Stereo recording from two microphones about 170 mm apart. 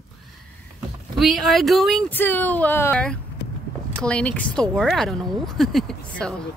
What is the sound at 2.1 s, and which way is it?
Speech, 10° left (ahead or behind).